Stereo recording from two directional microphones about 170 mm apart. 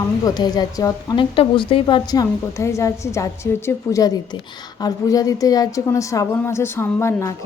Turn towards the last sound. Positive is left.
turn(degrees=15)  # may be behind; listen again after turning